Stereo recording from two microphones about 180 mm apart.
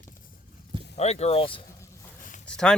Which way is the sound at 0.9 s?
35° left (ahead or behind).